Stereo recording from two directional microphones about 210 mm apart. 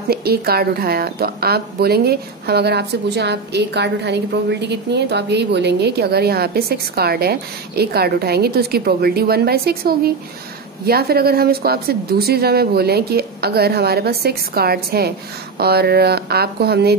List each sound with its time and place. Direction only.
0.1 s a woman's voice: 45° right (ahead or behind)